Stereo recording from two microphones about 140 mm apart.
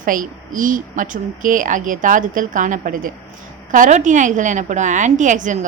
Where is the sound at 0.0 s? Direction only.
75° right (ahead or behind).